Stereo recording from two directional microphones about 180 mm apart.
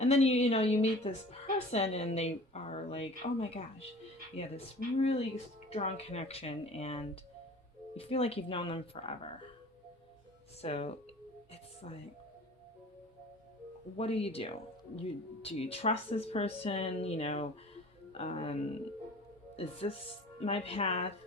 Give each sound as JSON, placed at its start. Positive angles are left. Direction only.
{"t": 0.0, "sound": "a woman's voice", "side_deg": 35}
{"t": 5.7, "sound": "a woman's voice", "side_deg": 35}
{"t": 10.6, "sound": "a woman's voice", "side_deg": 35}
{"t": 13.9, "sound": "a woman's voice", "side_deg": 35}
{"t": 19.5, "sound": "a woman's voice", "side_deg": 35}